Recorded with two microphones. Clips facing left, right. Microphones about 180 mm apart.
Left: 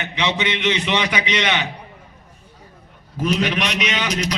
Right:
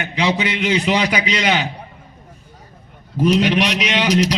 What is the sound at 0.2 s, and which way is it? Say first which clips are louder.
A man's voice: right 3 dB; 35° right (ahead or behind).